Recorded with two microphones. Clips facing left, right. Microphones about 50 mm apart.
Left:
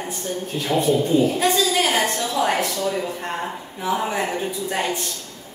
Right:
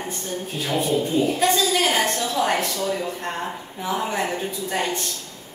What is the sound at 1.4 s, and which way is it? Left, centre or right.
A woman's voice, centre.